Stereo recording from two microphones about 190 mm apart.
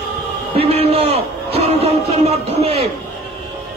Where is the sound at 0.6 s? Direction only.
30° right (ahead or behind).